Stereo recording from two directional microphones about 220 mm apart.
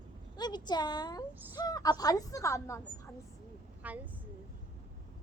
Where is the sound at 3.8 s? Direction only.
5° right (ahead or behind).